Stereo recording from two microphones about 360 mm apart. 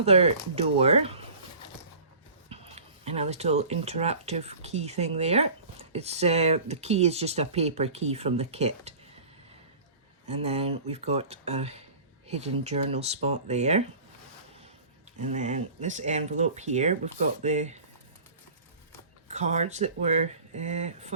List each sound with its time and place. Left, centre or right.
0.0 s speech: centre
2.5 s speech: centre
10.2 s speech: centre
15.2 s speech: centre
19.3 s speech: centre